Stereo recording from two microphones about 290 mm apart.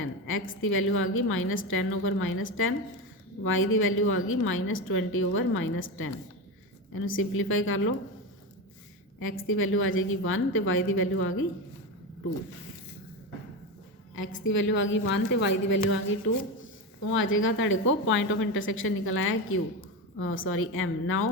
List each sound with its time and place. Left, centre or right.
0.0 s a sound: left
0.6 s a woman's voice: left
9.2 s a woman's voice: left
14.2 s a woman's voice: left